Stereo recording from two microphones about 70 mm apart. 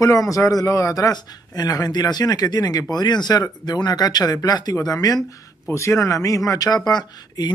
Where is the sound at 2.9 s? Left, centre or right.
Left.